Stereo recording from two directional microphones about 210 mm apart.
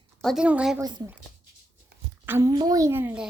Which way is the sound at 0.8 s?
20° right (ahead or behind).